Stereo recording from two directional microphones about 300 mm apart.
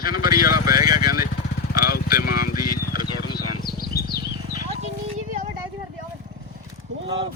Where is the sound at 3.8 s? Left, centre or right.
Left.